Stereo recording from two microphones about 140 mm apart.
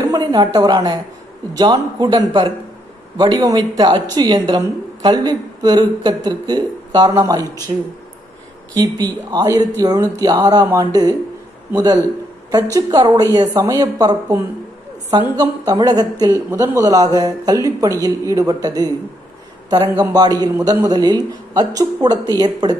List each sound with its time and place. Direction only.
0.0 s a woman's voice: 25° right (ahead or behind)
15.3 s a woman's voice: 30° right (ahead or behind)